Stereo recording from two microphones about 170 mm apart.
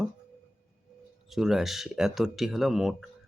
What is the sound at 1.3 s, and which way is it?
Speech, centre (ahead or behind).